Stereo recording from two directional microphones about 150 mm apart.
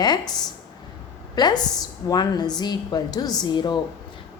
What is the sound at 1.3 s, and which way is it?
A woman's voice, 25° left (ahead or behind).